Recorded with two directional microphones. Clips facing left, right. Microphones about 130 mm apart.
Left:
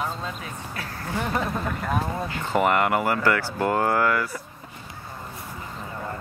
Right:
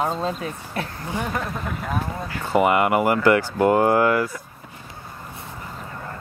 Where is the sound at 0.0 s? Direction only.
40° right (ahead or behind).